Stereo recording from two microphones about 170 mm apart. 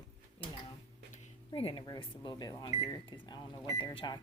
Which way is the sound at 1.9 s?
25° left (ahead or behind).